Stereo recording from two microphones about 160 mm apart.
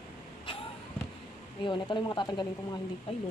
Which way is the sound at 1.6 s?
30° left (ahead or behind).